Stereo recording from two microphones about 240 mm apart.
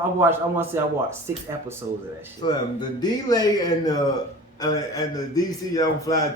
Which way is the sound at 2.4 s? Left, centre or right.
Centre.